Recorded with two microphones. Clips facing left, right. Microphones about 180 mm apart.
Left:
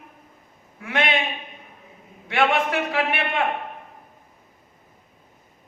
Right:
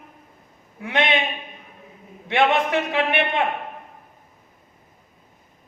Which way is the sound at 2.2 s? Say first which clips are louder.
Right 2 dB; 20° right (ahead or behind).